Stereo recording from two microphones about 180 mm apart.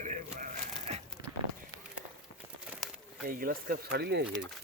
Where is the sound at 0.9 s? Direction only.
35° right (ahead or behind).